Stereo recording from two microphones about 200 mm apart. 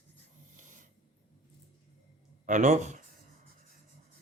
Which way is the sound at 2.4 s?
40° right (ahead or behind).